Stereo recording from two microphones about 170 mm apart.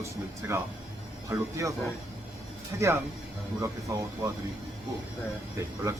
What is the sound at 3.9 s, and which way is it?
Speech, 15° right (ahead or behind).